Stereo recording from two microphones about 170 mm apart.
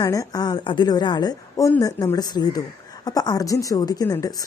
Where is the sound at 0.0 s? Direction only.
20° left (ahead or behind).